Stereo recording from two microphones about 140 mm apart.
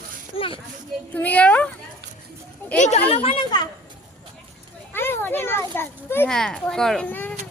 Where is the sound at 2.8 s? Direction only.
55° left (ahead or behind).